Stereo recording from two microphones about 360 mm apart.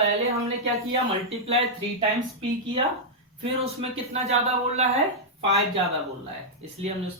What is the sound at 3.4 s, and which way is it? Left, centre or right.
Speech, centre.